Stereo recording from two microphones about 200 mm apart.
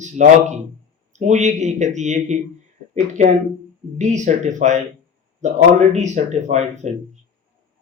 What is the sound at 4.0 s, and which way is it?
Speech, 35° right (ahead or behind).